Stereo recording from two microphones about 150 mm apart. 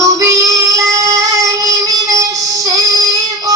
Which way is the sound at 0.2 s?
20° right (ahead or behind).